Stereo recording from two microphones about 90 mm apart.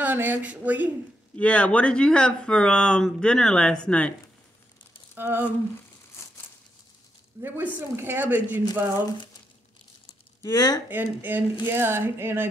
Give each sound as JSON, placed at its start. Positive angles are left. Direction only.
{"t": 0.0, "sound": "a woman's voice", "side_deg": -20}
{"t": 1.3, "sound": "speech", "side_deg": 15}
{"t": 5.1, "sound": "speech", "side_deg": -25}
{"t": 7.4, "sound": "a woman's voice", "side_deg": -25}
{"t": 10.4, "sound": "speech", "side_deg": 45}
{"t": 10.9, "sound": "a woman's voice", "side_deg": -20}